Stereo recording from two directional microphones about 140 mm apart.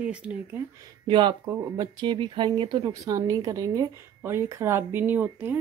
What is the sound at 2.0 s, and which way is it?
Speech, 35° right (ahead or behind).